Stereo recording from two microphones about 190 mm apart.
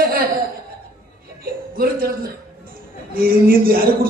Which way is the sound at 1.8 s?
50° right (ahead or behind).